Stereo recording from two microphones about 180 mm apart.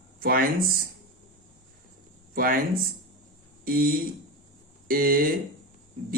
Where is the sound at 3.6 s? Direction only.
55° right (ahead or behind).